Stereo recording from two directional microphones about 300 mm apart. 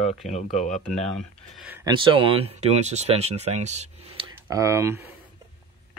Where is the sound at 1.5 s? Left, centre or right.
Centre; by 4.2 s right.